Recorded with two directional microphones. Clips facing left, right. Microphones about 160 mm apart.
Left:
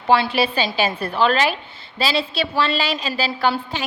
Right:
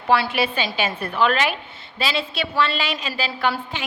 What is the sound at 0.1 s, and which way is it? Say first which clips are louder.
A woman's voice: left 2 dB; 30° left (ahead or behind).